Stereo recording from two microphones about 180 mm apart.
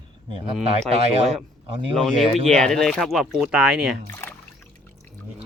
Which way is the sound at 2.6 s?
Centre (ahead or behind).